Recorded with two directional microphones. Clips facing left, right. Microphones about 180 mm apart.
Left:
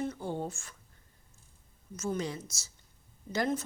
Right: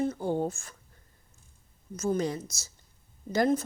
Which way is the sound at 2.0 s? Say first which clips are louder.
Right 6 dB; 40° right (ahead or behind).